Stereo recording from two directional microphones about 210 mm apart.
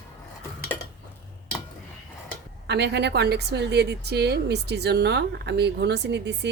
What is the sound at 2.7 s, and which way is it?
A woman's voice, 55° right (ahead or behind).